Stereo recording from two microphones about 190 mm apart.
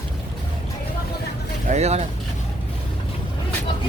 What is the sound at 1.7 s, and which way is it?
Speech, 35° right (ahead or behind).